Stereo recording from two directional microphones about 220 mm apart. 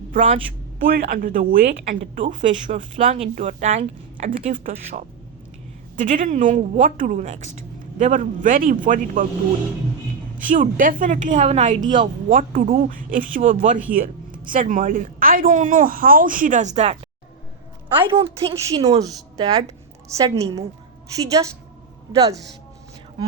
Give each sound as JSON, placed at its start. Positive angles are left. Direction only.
{"t": 0.8, "sound": "speech", "side_deg": -45}
{"t": 10.3, "sound": "speech", "side_deg": -35}
{"t": 17.8, "sound": "a woman's voice", "side_deg": -10}
{"t": 18.1, "sound": "a woman's voice", "side_deg": -25}